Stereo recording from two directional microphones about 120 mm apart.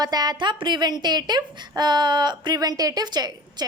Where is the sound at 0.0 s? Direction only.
35° right (ahead or behind).